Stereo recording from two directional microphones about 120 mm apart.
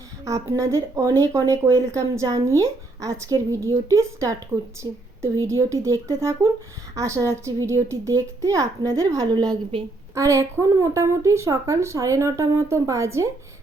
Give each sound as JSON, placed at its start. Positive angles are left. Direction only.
{"t": 0.3, "sound": "a woman's voice", "side_deg": -25}